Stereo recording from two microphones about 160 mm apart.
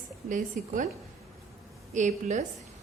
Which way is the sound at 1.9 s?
50° right (ahead or behind).